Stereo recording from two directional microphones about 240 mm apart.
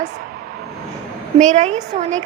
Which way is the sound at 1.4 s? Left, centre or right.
Right.